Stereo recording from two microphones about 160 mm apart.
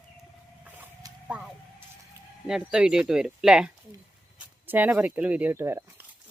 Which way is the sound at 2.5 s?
5° right (ahead or behind).